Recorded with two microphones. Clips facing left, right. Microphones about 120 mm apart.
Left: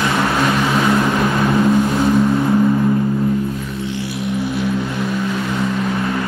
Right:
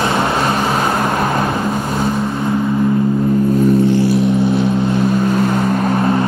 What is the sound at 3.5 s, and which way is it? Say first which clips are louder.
Vehicle: right 12 dB; 45° right (ahead or behind).